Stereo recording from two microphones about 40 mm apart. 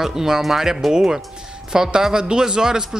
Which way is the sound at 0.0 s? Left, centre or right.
Centre.